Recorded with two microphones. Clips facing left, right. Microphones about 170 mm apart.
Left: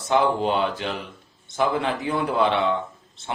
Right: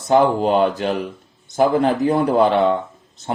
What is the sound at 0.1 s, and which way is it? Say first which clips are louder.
Speech: right 6 dB; 40° right (ahead or behind).